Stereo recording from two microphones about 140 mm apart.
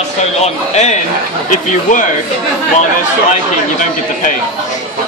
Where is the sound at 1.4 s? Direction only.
65° left (ahead or behind).